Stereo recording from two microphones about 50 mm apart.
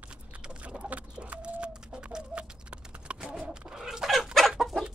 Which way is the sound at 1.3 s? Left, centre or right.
Right.